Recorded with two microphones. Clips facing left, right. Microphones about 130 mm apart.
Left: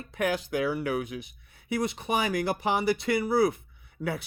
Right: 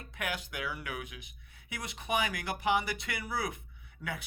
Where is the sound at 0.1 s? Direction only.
35° left (ahead or behind).